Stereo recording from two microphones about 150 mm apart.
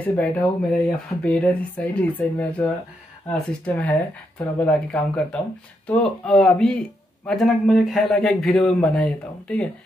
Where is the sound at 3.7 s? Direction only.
10° left (ahead or behind).